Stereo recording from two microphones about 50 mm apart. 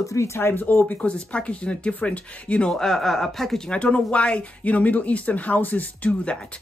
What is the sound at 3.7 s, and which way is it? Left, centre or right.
Speech, left.